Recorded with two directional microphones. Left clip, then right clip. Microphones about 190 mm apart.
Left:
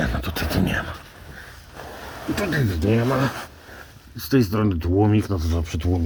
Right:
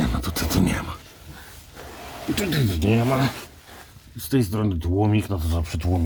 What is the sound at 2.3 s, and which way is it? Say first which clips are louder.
Speech: left 2 dB; 20° right (ahead or behind).